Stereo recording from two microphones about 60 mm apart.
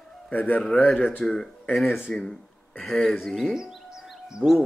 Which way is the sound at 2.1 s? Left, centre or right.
Centre.